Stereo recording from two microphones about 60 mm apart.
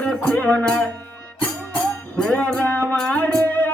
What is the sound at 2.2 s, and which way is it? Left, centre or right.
Speech, left.